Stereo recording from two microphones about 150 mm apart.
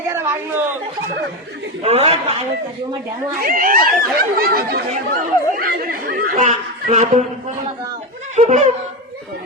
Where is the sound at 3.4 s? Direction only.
70° right (ahead or behind).